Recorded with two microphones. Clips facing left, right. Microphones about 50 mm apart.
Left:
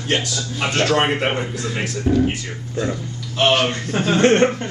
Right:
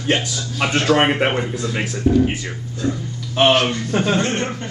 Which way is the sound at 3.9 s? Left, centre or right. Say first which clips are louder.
Right 1 dB; centre.